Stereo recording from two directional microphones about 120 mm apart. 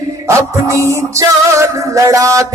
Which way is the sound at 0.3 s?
25° right (ahead or behind).